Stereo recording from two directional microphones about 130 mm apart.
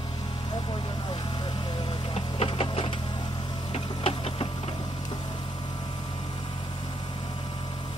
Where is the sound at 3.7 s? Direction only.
45° left (ahead or behind).